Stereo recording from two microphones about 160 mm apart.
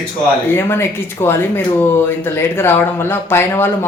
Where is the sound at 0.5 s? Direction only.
15° left (ahead or behind).